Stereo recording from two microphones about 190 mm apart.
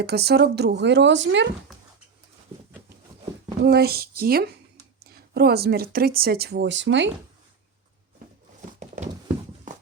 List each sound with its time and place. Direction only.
0.0 s speech: 60° right (ahead or behind)
3.6 s speech: 55° right (ahead or behind)